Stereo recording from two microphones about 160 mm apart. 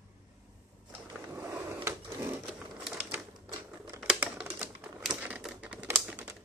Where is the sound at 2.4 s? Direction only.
5° right (ahead or behind).